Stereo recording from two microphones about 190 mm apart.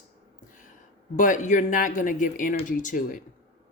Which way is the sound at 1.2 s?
40° left (ahead or behind).